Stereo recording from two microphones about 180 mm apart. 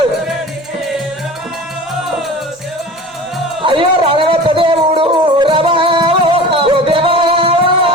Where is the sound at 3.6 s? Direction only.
30° right (ahead or behind).